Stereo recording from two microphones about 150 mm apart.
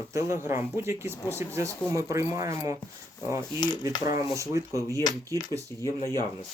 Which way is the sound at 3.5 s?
30° left (ahead or behind).